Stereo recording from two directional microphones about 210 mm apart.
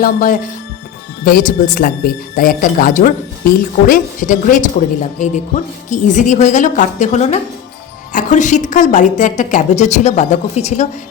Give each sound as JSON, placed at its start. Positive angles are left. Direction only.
{"t": 0.0, "sound": "speech", "side_deg": 40}